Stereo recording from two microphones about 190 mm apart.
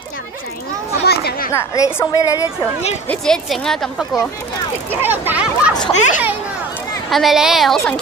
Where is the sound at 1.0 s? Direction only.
55° left (ahead or behind).